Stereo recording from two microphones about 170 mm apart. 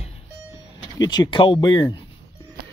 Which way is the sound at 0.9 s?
25° left (ahead or behind).